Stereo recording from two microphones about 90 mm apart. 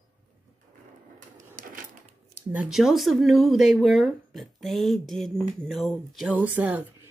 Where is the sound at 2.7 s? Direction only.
5° right (ahead or behind).